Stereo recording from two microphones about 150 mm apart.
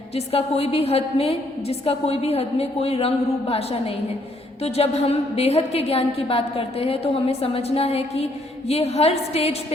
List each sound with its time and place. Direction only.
0.3 s a woman's voice: 40° left (ahead or behind)